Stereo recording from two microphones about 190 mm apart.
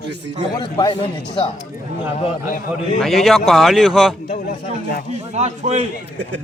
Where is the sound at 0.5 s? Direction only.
25° left (ahead or behind).